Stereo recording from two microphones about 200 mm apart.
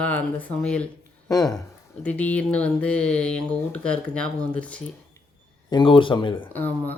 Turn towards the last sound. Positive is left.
turn(degrees=10)  # may be behind; listen again after turning